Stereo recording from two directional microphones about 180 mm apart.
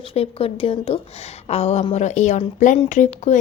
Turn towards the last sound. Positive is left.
turn(degrees=40)  # may be behind; listen again after turning